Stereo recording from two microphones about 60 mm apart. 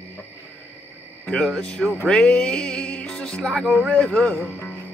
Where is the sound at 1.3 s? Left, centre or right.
Centre.